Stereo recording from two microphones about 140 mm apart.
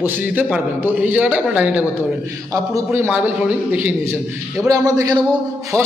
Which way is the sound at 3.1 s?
10° right (ahead or behind).